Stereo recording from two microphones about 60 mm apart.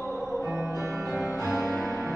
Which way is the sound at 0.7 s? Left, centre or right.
Right.